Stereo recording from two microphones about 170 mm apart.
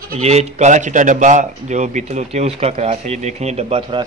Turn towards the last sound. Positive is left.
turn(degrees=-35)  # may be behind; listen again after turning